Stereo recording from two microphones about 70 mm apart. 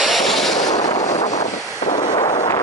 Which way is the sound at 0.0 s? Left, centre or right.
Centre.